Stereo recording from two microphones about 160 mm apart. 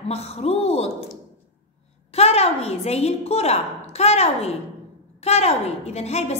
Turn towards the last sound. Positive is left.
turn(degrees=40)  # may be behind; listen again after turning